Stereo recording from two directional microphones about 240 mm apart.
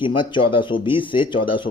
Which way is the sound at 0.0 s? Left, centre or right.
Left.